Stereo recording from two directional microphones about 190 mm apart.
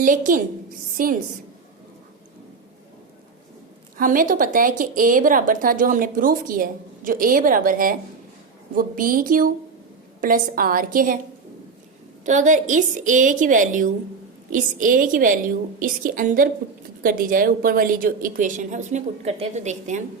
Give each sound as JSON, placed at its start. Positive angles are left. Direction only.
{"t": 0.0, "sound": "a woman's voice", "side_deg": -45}
{"t": 3.9, "sound": "a woman's voice", "side_deg": -45}
{"t": 12.2, "sound": "a woman's voice", "side_deg": -40}